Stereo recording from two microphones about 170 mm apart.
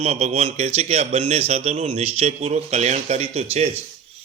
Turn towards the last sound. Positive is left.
turn(degrees=-40)  # may be behind; listen again after turning